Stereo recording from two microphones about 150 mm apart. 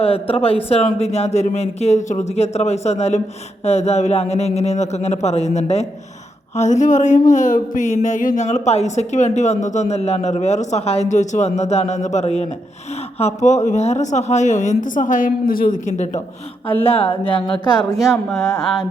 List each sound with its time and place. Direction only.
0.0 s speech: 40° left (ahead or behind); by 15.7 s 70° left (ahead or behind)
15.9 s speech: 50° left (ahead or behind)
16.8 s speech: 40° left (ahead or behind)
17.7 s speech: centre (ahead or behind)